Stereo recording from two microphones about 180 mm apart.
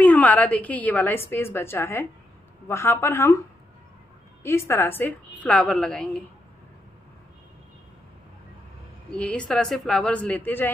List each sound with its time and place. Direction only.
0.0 s a woman's voice: 10° left (ahead or behind)
4.4 s a woman's voice: 15° left (ahead or behind)
9.1 s a woman's voice: 5° left (ahead or behind)